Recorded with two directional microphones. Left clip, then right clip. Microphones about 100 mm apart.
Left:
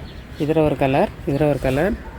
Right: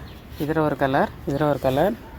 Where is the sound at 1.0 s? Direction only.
40° right (ahead or behind).